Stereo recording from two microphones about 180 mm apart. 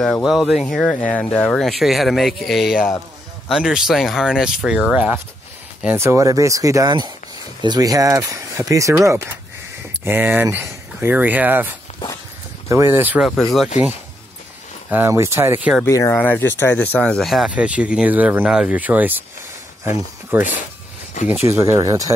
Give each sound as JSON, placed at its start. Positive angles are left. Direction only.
{"t": 0.0, "sound": "speech", "side_deg": 0}
{"t": 13.4, "sound": "speech", "side_deg": 0}
{"t": 14.9, "sound": "speech", "side_deg": -15}
{"t": 15.8, "sound": "speech", "side_deg": 15}
{"t": 21.2, "sound": "speech", "side_deg": 40}
{"t": 21.5, "sound": "speech", "side_deg": -15}